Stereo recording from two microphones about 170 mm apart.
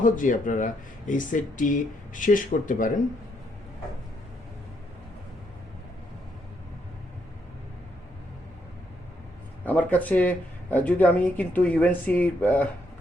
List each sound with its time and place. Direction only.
0.0 s speech: 50° left (ahead or behind)
9.6 s speech: 10° left (ahead or behind)